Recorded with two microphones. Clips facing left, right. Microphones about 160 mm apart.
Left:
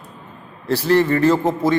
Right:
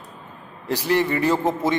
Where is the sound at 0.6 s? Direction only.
15° right (ahead or behind).